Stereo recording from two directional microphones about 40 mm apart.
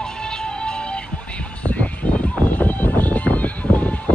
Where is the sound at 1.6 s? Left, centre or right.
Left.